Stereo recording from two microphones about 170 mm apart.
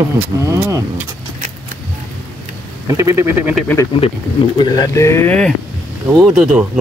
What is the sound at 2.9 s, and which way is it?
Speech, 15° right (ahead or behind).